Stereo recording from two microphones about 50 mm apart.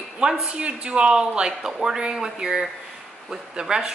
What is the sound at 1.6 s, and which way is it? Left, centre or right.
A woman's voice, centre.